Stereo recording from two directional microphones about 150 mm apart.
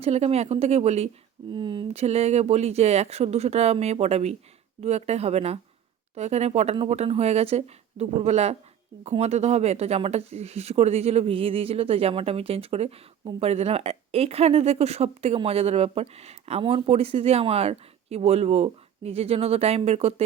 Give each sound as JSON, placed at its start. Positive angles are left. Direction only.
{"t": 0.0, "sound": "speech", "side_deg": -45}
{"t": 1.5, "sound": "speech", "side_deg": -30}
{"t": 1.9, "sound": "speech", "side_deg": -45}